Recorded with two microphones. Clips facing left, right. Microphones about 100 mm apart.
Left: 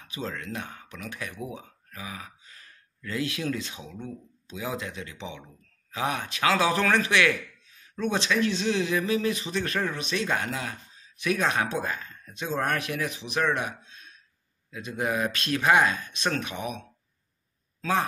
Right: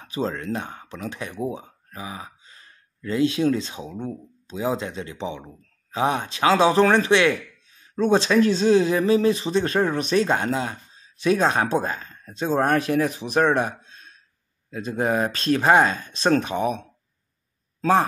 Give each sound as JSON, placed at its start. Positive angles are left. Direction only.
{"t": 0.0, "sound": "speech", "side_deg": -35}
{"t": 9.9, "sound": "speech", "side_deg": -40}